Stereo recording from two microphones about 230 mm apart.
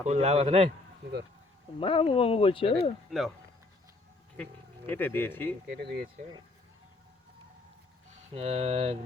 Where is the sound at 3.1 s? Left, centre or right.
Centre.